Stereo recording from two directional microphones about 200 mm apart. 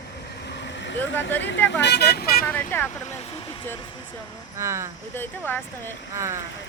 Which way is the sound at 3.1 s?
25° left (ahead or behind).